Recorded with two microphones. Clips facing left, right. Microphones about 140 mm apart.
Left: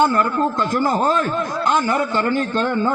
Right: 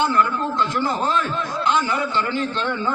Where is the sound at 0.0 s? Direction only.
45° left (ahead or behind).